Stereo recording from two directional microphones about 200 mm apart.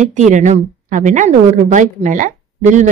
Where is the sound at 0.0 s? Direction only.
40° right (ahead or behind).